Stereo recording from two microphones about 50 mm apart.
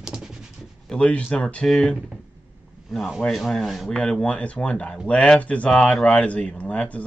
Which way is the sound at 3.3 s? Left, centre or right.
Centre.